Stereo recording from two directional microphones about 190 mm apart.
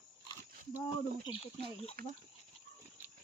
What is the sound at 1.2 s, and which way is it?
Speech, 25° left (ahead or behind).